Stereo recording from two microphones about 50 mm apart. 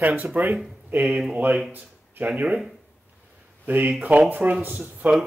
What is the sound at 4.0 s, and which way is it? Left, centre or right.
Speech, right.